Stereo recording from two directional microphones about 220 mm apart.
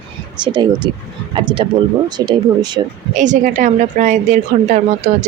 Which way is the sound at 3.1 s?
35° right (ahead or behind).